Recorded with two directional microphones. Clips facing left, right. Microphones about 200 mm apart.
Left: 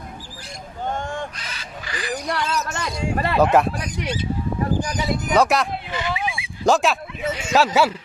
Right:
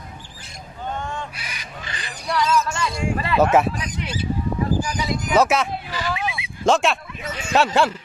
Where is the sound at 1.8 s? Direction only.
25° right (ahead or behind).